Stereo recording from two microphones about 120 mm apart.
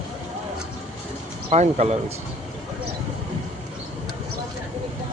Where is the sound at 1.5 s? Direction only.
75° right (ahead or behind).